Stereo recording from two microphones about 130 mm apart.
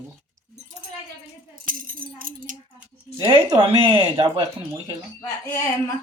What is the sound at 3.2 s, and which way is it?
Speech, 45° right (ahead or behind).